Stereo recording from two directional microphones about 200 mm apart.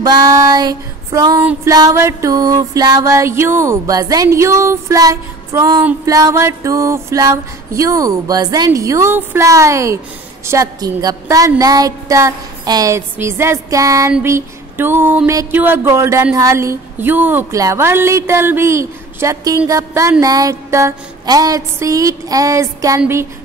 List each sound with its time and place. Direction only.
0.0 s speech: 20° right (ahead or behind)